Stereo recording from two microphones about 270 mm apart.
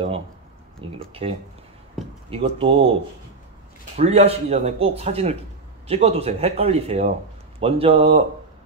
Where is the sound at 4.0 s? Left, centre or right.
Right.